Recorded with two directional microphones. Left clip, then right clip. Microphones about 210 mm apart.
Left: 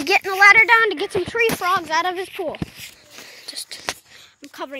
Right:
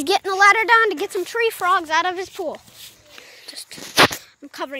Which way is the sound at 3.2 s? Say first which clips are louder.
Left 4 dB; centre (ahead or behind).